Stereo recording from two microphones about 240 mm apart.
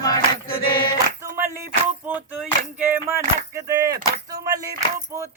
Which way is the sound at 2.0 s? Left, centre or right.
Centre.